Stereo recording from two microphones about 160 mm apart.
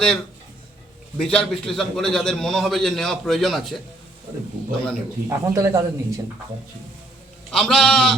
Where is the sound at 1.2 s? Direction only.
5° left (ahead or behind).